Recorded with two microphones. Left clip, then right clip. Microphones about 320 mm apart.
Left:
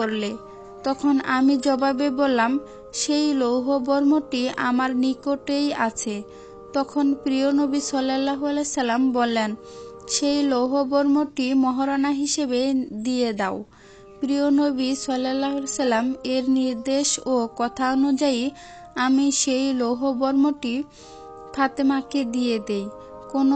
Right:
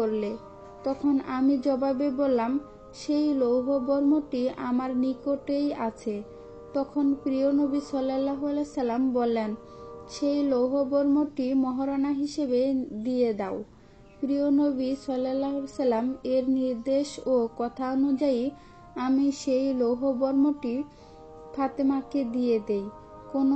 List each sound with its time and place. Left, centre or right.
0.8 s speech: left